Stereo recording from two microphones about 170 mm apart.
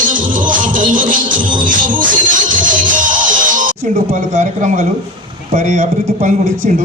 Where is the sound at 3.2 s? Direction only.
50° right (ahead or behind).